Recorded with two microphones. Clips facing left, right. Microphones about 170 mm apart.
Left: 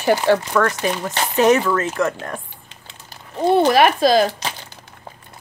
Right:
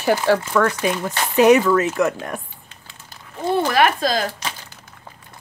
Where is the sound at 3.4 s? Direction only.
15° left (ahead or behind).